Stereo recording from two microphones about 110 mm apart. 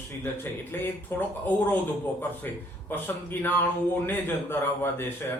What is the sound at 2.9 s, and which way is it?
A man's voice, 20° left (ahead or behind).